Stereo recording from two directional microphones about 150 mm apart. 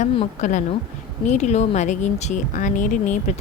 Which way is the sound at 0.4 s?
55° left (ahead or behind).